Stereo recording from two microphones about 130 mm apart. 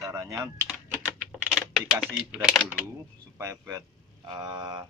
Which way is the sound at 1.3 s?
5° right (ahead or behind).